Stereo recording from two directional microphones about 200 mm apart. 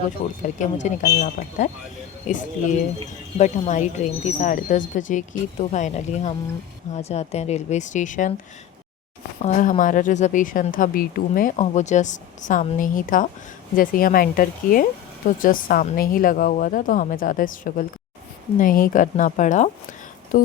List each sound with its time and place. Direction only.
0.4 s speech: 40° left (ahead or behind)
9.4 s a woman's voice: 40° left (ahead or behind)
20.3 s music: 40° left (ahead or behind)